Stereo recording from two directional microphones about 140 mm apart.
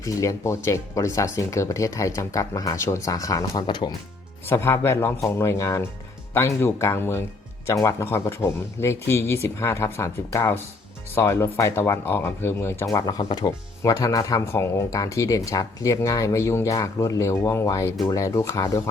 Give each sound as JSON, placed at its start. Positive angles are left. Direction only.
{"t": 0.0, "sound": "speech", "side_deg": 20}
{"t": 4.4, "sound": "speech", "side_deg": 20}